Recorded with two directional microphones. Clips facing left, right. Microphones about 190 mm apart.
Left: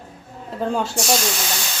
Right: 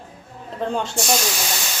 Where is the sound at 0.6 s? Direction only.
5° left (ahead or behind).